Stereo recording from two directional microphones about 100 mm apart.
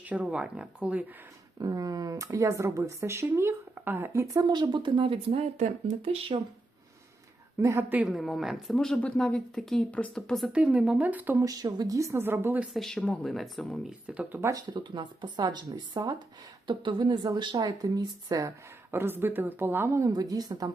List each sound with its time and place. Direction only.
0.0 s speech: 15° right (ahead or behind)
1.5 s speech: 35° right (ahead or behind)
4.4 s speech: 45° right (ahead or behind); by 6.4 s 65° right (ahead or behind)
7.6 s a woman's voice: 25° right (ahead or behind)
8.0 s speech: centre (ahead or behind)
10.5 s speech: 10° right (ahead or behind)
11.4 s speech: 40° right (ahead or behind); by 12.6 s 20° right (ahead or behind)
12.7 s speech: 5° left (ahead or behind)
14.1 s speech: 15° right (ahead or behind)
14.4 s speech: 40° right (ahead or behind)
16.6 s speech: 55° right (ahead or behind)
17.7 s speech: 35° right (ahead or behind)
18.9 s a woman's voice: 20° right (ahead or behind); by 20.7 s 40° right (ahead or behind)